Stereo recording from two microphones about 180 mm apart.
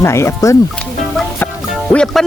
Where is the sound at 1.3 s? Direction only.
10° left (ahead or behind).